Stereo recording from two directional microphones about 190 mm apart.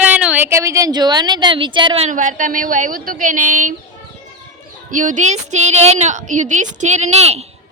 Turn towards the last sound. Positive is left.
turn(degrees=-35)  # may be behind; listen again after turning